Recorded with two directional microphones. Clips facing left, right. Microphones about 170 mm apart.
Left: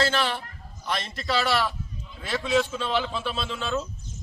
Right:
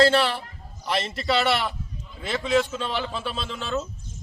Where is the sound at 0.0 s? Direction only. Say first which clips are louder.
Right 6 dB; 35° right (ahead or behind).